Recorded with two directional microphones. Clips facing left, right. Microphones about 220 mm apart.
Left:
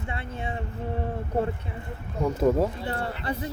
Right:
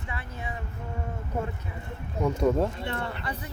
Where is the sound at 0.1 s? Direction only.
25° left (ahead or behind).